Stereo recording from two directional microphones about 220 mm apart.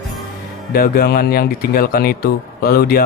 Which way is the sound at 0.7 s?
45° left (ahead or behind).